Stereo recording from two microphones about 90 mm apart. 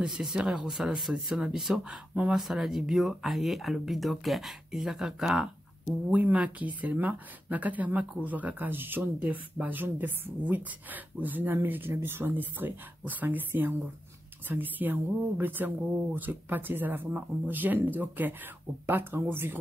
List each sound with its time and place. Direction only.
0.0 s speech: 5° right (ahead or behind)
6.1 s speech: 15° right (ahead or behind)